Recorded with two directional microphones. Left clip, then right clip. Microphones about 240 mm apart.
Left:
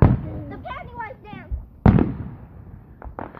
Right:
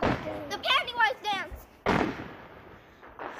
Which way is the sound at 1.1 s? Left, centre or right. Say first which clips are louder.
Right 9 dB; right.